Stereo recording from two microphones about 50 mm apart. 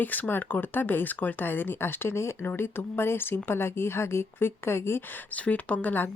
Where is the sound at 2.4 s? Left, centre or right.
Left.